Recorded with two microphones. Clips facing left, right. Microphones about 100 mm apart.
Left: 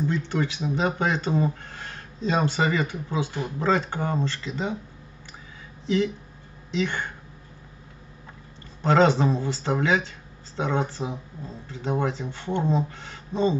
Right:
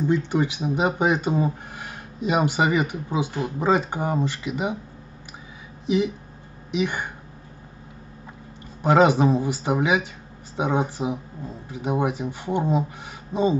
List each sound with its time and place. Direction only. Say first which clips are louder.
0.0 s speech: right 4 dB; 15° right (ahead or behind)
5.9 s speech: right 2 dB; 15° right (ahead or behind)
8.8 s speech: right 2 dB; 15° right (ahead or behind)